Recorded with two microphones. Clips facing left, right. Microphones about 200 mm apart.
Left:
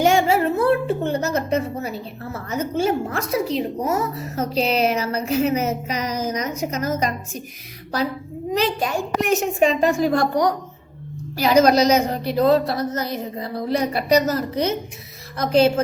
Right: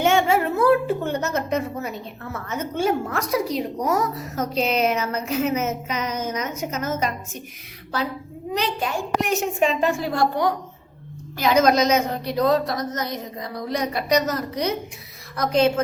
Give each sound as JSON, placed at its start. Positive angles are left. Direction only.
{"t": 0.0, "sound": "a sound", "side_deg": 35}
{"t": 1.0, "sound": "a woman's voice", "side_deg": 30}
{"t": 8.5, "sound": "a child's voice", "side_deg": 45}